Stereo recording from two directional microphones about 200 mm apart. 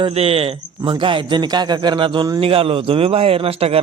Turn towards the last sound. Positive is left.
turn(degrees=-30)  # may be behind; listen again after turning